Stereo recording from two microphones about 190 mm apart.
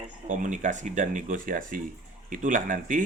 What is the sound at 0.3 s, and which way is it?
Speech, 40° right (ahead or behind).